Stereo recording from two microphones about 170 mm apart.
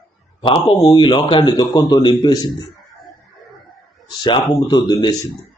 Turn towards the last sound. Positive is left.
turn(degrees=25)  # may be behind; listen again after turning